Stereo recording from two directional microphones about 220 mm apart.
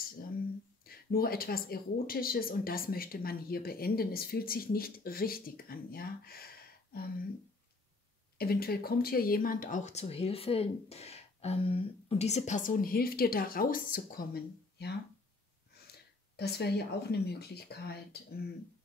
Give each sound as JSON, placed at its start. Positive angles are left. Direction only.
{"t": 0.8, "sound": "speech", "side_deg": 45}
{"t": 8.4, "sound": "speech", "side_deg": 45}
{"t": 16.3, "sound": "speech", "side_deg": 45}